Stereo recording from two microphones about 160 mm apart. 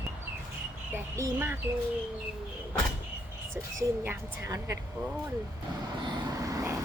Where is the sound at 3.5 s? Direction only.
15° right (ahead or behind).